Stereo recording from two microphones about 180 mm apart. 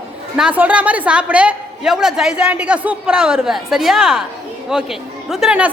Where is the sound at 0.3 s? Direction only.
5° right (ahead or behind).